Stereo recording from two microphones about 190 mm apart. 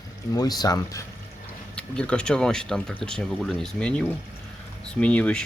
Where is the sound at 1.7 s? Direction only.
5° left (ahead or behind).